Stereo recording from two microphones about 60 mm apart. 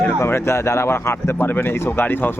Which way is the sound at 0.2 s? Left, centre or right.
Left.